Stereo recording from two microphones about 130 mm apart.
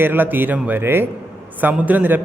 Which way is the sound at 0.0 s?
15° right (ahead or behind).